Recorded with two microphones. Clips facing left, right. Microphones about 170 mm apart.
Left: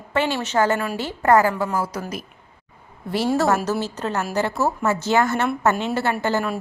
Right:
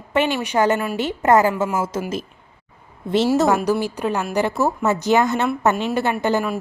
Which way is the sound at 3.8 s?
15° right (ahead or behind).